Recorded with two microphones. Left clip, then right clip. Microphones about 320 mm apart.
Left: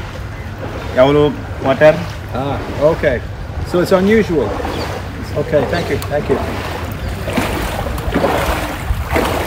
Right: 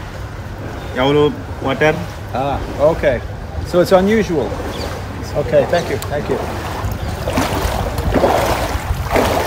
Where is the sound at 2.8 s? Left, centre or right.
Centre.